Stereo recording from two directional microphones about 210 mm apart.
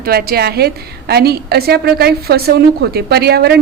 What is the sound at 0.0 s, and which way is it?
A woman's voice, 45° right (ahead or behind).